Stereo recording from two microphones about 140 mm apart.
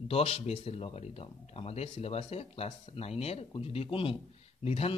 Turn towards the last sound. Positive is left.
turn(degrees=45)  # may be behind; listen again after turning